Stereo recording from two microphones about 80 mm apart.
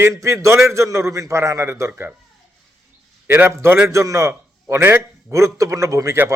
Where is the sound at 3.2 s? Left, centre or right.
Right.